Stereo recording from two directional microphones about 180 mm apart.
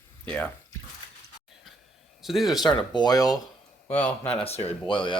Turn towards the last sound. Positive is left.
turn(degrees=25)  # may be behind; listen again after turning